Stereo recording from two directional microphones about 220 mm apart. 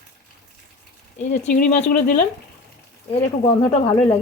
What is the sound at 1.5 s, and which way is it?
Speech, 40° left (ahead or behind).